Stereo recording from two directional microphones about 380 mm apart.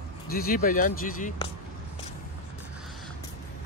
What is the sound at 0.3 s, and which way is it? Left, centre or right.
Speech, left.